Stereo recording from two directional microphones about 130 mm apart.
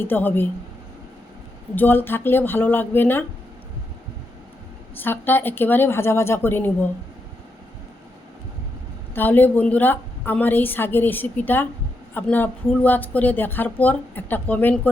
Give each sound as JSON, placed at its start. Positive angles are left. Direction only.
{"t": 0.0, "sound": "speech", "side_deg": 15}
{"t": 1.7, "sound": "speech", "side_deg": 15}
{"t": 4.9, "sound": "speech", "side_deg": 15}
{"t": 9.1, "sound": "speech", "side_deg": 15}